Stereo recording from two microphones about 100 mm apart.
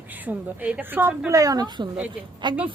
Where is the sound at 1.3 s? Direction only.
35° right (ahead or behind).